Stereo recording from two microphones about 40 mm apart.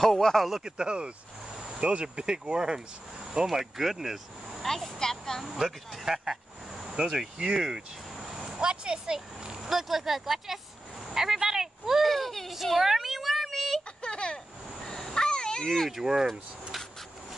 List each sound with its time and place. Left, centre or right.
0.0 s speech: centre
0.7 s speech: right
3.4 s speech: centre
4.6 s a sound: centre
5.5 s speech: centre
12.0 s speech: centre
12.7 s a sound: centre
14.0 s vehicle: left
14.9 s a sound: centre
16.0 s speech: centre